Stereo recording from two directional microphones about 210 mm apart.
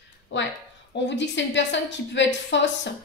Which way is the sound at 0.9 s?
55° left (ahead or behind).